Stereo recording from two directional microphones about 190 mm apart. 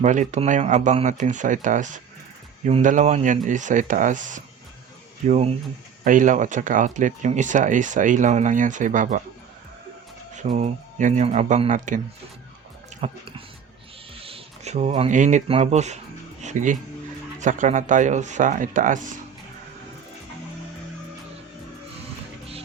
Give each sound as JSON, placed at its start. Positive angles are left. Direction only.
{"t": 0.0, "sound": "speech", "side_deg": -40}
{"t": 10.5, "sound": "speech", "side_deg": -40}
{"t": 13.0, "sound": "speech", "side_deg": -35}
{"t": 14.2, "sound": "speech", "side_deg": -30}
{"t": 16.4, "sound": "music", "side_deg": -40}
{"t": 17.4, "sound": "speech", "side_deg": -40}